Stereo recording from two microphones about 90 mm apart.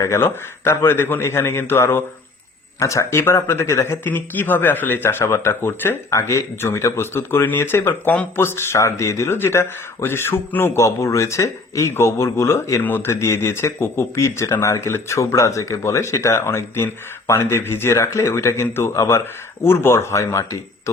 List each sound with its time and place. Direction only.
0.0 s speech: 30° left (ahead or behind)
8.1 s speech: 15° left (ahead or behind)
8.4 s speech: 30° left (ahead or behind)